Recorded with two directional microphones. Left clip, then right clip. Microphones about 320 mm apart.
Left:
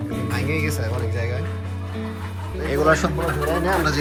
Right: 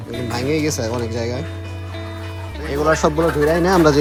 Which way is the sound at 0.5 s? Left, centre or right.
Centre.